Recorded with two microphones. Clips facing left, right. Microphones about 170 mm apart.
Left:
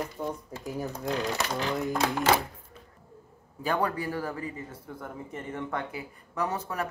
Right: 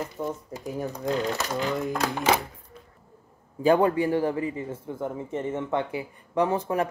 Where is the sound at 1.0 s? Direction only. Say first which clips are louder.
Right 3 dB; centre (ahead or behind).